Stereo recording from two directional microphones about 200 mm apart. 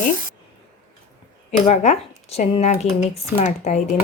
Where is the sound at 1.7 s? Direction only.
30° left (ahead or behind).